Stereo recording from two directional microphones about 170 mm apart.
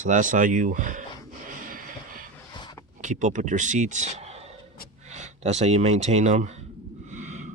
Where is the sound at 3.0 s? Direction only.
45° right (ahead or behind).